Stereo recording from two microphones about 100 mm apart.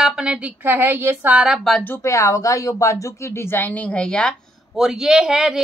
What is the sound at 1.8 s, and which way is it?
Speech, 25° left (ahead or behind).